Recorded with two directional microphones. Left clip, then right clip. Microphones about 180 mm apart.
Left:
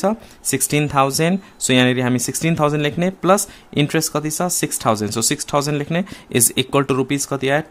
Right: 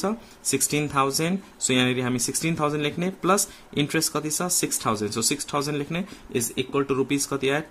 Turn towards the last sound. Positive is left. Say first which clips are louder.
# left 6 dB
turn(degrees=35)  # may be behind; listen again after turning